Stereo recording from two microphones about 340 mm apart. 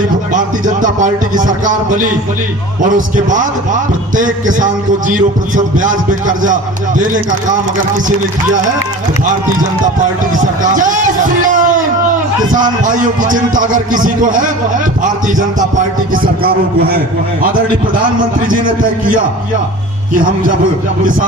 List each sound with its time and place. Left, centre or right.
0.3 s a man's voice: right
10.3 s a man's voice: right
18.4 s a man's voice: right